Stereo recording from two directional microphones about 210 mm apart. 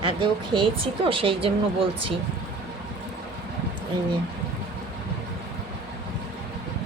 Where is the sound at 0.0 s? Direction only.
25° right (ahead or behind).